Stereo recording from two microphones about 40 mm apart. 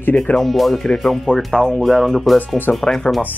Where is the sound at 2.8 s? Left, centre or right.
Left.